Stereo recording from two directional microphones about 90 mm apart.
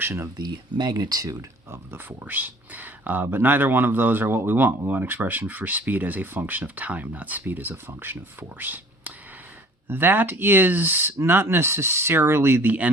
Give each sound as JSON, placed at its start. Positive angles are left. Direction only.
{"t": 0.0, "sound": "speech", "side_deg": -30}
{"t": 0.3, "sound": "speech", "side_deg": -50}
{"t": 1.7, "sound": "speech", "side_deg": -25}